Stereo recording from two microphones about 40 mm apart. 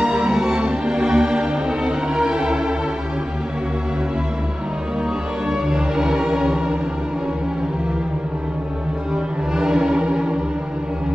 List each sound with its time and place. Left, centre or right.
0.0 s music: right
5.5 s music: centre
9.6 s music: centre